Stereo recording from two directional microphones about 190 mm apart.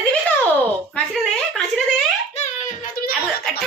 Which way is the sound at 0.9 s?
Centre (ahead or behind).